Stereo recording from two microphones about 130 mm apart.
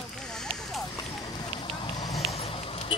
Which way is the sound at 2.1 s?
50° left (ahead or behind).